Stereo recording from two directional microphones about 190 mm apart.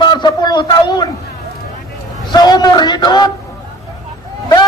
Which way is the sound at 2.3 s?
20° left (ahead or behind).